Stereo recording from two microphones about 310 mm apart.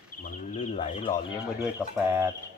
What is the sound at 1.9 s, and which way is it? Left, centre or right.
Speech, centre.